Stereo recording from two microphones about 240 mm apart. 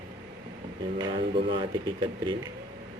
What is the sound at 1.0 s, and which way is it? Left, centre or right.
Speech, right.